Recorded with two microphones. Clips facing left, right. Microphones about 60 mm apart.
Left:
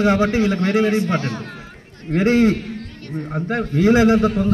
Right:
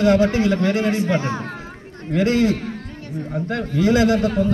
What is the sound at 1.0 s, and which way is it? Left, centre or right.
Speech, centre.